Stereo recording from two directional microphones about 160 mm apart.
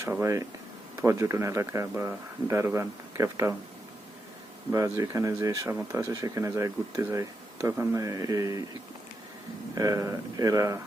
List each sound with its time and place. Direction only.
0.0 s speech: 15° right (ahead or behind)
4.7 s speech: 20° right (ahead or behind)
9.7 s speech: 20° right (ahead or behind)